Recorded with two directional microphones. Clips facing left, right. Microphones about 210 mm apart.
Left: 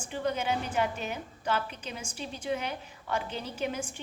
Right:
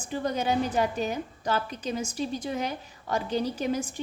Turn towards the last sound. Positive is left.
turn(degrees=-35)  # may be behind; listen again after turning